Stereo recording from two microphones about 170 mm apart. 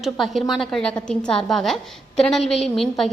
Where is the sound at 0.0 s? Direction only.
Centre (ahead or behind).